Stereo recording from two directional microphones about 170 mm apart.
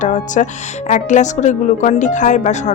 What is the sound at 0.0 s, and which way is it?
A woman's voice, 45° left (ahead or behind).